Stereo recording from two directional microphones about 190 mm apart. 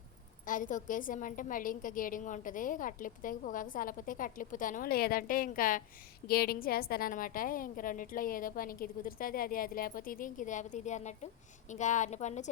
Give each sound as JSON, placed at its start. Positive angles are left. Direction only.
{"t": 0.4, "sound": "a woman's voice", "side_deg": 45}